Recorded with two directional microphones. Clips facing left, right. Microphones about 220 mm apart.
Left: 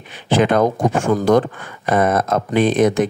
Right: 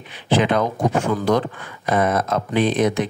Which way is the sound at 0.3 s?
45° left (ahead or behind).